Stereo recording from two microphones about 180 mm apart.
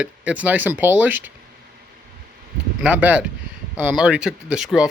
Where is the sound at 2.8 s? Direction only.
5° right (ahead or behind).